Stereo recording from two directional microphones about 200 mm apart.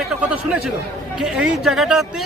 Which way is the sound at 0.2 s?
5° right (ahead or behind).